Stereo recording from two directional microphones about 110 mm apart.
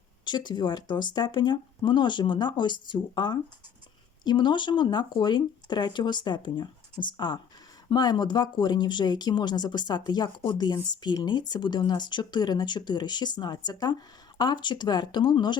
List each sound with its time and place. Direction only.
0.3 s speech: 45° left (ahead or behind)